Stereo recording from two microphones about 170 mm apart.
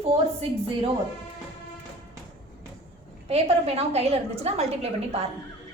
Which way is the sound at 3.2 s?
35° right (ahead or behind).